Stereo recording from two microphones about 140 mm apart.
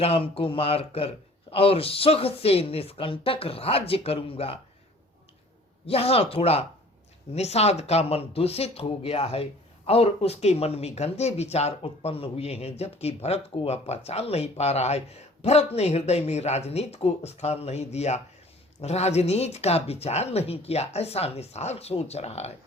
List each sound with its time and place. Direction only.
0.0 s speech: 45° left (ahead or behind)
5.8 s speech: 45° left (ahead or behind)